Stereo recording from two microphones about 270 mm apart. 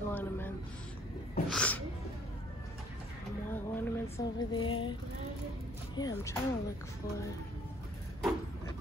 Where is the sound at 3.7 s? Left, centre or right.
Centre.